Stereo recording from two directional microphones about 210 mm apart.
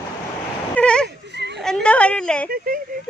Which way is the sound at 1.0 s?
55° right (ahead or behind).